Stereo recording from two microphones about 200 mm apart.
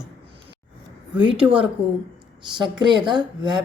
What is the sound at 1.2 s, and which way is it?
Speech, 25° right (ahead or behind).